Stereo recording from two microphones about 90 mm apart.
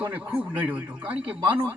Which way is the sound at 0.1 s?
20° right (ahead or behind).